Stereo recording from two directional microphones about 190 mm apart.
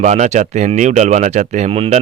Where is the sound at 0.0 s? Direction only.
40° right (ahead or behind).